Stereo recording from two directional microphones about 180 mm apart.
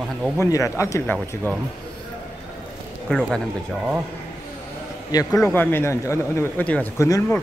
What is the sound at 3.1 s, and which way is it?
Speech, 5° left (ahead or behind).